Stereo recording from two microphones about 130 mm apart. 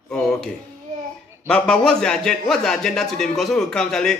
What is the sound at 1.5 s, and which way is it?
A man's voice, 5° left (ahead or behind).